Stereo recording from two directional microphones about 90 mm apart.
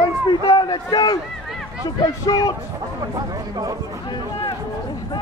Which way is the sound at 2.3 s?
50° left (ahead or behind).